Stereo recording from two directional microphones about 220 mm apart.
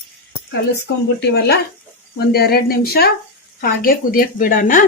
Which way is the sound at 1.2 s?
45° left (ahead or behind).